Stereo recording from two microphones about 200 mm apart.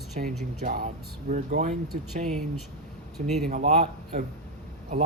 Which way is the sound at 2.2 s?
Centre (ahead or behind).